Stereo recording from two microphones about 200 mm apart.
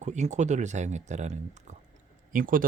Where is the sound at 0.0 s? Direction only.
35° right (ahead or behind).